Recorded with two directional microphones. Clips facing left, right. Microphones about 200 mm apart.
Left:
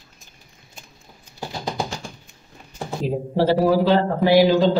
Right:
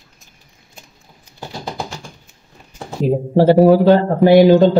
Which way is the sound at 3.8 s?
50° right (ahead or behind).